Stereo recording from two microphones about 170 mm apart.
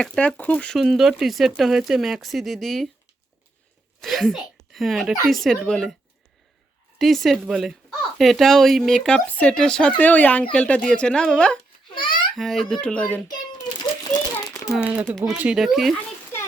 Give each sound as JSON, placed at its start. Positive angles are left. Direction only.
{"t": 0.0, "sound": "speech", "side_deg": 5}
{"t": 4.0, "sound": "speech", "side_deg": 0}
{"t": 7.0, "sound": "speech", "side_deg": 0}
{"t": 11.9, "sound": "a sound", "side_deg": 25}
{"t": 12.4, "sound": "speech", "side_deg": 0}
{"t": 14.4, "sound": "a sound", "side_deg": 20}
{"t": 14.7, "sound": "speech", "side_deg": -5}